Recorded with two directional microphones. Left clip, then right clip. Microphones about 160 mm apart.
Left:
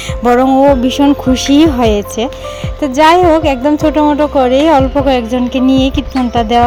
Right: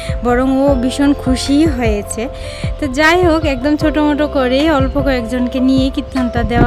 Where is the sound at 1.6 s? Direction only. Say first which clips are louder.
Left 6 dB; 15° right (ahead or behind).